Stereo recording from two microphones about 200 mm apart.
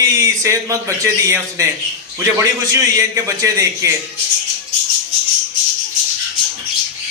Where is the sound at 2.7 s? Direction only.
15° right (ahead or behind).